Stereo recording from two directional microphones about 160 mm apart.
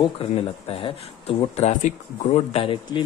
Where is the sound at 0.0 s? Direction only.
35° left (ahead or behind).